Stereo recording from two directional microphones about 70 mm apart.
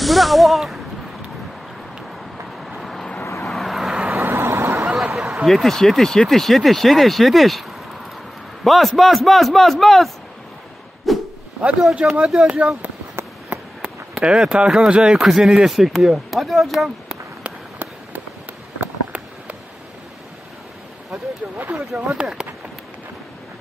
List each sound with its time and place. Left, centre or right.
0.0 s speech: centre
2.6 s vehicle: centre
4.2 s vehicle: right
4.8 s a sound: centre
5.5 s speech: centre
8.6 s speech: centre
11.1 s a sound: centre
11.9 s speech: centre
13.8 s speech: centre
17.4 s a sound: right
21.1 s speech: right
22.1 s speech: centre